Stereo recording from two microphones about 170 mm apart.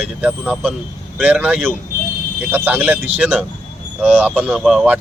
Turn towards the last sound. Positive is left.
turn(degrees=0)  # may be behind; listen again after turning